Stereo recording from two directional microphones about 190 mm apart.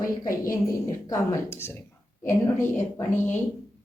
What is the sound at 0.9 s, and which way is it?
A woman's voice, 20° left (ahead or behind).